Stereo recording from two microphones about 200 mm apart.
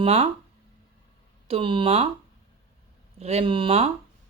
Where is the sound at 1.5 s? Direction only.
25° right (ahead or behind).